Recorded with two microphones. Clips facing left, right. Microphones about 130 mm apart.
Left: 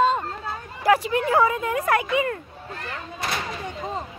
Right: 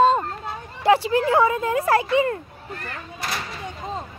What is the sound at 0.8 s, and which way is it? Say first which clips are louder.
Speech: right 2 dB; 30° right (ahead or behind).